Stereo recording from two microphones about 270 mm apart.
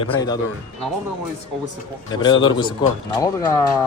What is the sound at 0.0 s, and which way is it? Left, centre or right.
Speech, centre.